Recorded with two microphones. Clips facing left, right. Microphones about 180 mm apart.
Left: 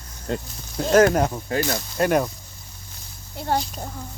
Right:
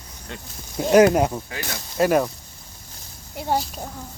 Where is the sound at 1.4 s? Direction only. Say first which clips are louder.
Left 9 dB; 40° left (ahead or behind).